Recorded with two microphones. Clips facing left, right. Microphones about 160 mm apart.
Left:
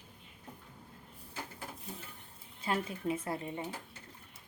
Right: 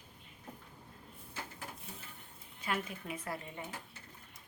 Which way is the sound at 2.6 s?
30° left (ahead or behind).